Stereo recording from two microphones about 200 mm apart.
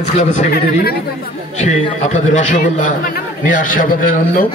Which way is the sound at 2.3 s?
40° left (ahead or behind).